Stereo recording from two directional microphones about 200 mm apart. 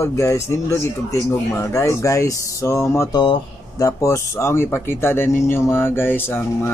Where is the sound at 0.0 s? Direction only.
15° left (ahead or behind).